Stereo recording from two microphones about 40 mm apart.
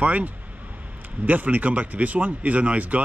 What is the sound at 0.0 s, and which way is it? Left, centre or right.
Speech, right.